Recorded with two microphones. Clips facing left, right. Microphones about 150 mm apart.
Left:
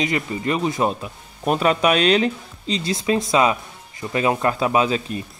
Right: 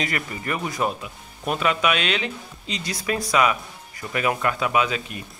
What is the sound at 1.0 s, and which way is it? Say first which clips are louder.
Speech: left 4 dB; 35° left (ahead or behind).